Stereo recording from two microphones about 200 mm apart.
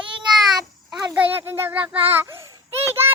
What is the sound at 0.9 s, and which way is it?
A child's voice, 10° right (ahead or behind).